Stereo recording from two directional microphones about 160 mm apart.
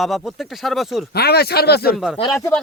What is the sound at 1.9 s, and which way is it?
Speech, centre (ahead or behind).